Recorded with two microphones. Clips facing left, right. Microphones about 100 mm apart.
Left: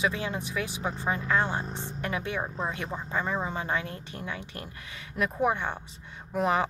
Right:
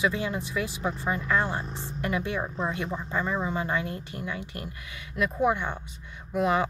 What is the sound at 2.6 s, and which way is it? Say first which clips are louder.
Speech: right 3 dB; 25° left (ahead or behind).